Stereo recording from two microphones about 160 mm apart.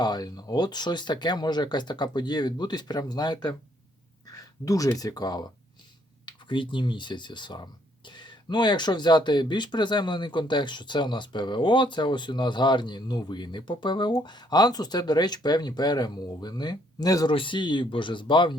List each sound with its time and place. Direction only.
0.0 s speech: 25° left (ahead or behind)